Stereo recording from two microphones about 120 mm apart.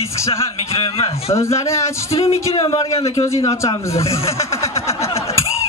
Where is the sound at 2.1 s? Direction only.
60° left (ahead or behind).